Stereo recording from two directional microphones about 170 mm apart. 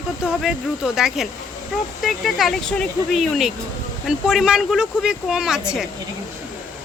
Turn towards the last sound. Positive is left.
turn(degrees=-5)  # may be behind; listen again after turning